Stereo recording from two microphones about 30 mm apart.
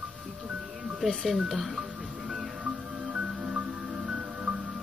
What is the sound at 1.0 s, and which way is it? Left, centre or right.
Speech, centre.